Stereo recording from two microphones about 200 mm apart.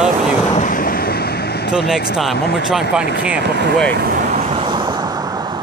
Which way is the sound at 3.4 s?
60° right (ahead or behind).